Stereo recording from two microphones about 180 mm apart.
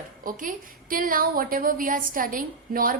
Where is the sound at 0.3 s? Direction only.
50° right (ahead or behind).